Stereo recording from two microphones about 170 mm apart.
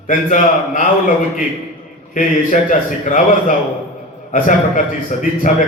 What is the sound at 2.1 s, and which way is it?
A man's voice, 50° left (ahead or behind).